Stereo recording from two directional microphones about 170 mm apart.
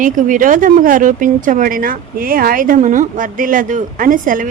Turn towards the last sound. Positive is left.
turn(degrees=-50)  # may be behind; listen again after turning